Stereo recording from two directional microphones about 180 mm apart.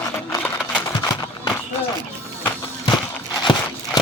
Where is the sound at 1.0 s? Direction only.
20° left (ahead or behind).